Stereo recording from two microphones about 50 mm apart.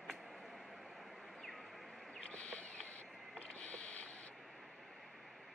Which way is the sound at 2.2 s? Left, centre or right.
Left.